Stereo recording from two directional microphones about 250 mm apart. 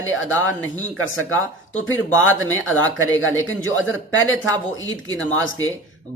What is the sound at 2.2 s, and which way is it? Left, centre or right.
A man's voice, left.